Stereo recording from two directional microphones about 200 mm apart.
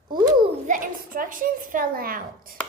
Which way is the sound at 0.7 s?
45° right (ahead or behind).